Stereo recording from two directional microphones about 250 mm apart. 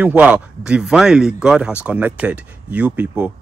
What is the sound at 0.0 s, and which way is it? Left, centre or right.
Speech, centre.